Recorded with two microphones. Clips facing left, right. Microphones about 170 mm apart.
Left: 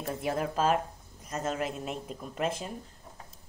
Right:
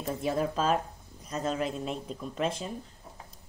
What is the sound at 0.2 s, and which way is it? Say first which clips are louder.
Speech: even; 10° left (ahead or behind).